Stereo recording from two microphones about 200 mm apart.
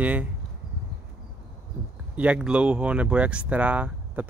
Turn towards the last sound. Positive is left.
turn(degrees=-5)  # may be behind; listen again after turning